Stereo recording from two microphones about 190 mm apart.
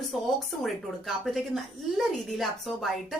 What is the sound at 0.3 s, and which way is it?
A woman's voice, centre (ahead or behind).